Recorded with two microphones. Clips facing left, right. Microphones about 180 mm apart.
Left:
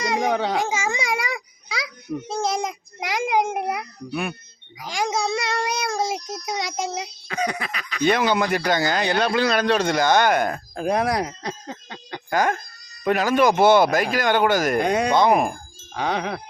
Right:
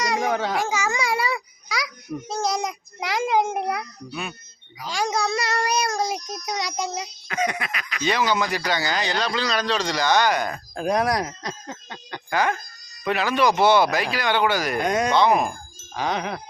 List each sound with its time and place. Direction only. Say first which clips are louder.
0.0 s baby cry: left 1 dB; 25° left (ahead or behind)
0.5 s a child's voice: left 1 dB; 20° left (ahead or behind)
4.1 s a man's voice: left 6 dB; 55° left (ahead or behind)
4.8 s a child's voice: even; 20° left (ahead or behind); by 8.0 s 35° left (ahead or behind)
8.0 s a man's voice: left 3 dB; 55° left (ahead or behind)
10.8 s a child's voice: even; 25° left (ahead or behind)
12.3 s speech: left 2 dB; 45° left (ahead or behind)
14.8 s speech: left 1 dB; 30° left (ahead or behind)
15.1 s speech: left 1 dB; 50° left (ahead or behind)
16.0 s speech: left 1 dB; 30° left (ahead or behind)